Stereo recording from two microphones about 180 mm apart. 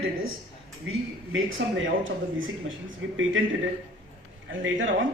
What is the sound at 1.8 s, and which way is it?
A man's voice, 90° right.